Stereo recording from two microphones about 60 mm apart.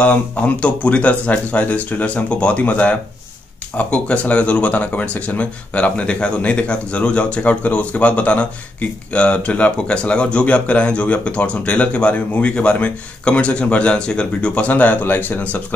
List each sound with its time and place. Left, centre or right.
0.0 s speech: left